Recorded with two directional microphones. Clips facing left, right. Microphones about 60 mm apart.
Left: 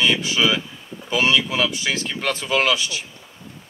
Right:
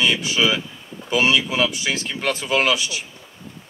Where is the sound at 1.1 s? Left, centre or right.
Centre.